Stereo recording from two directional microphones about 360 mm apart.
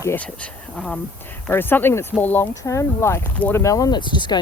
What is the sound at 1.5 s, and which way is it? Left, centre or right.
Speech, centre.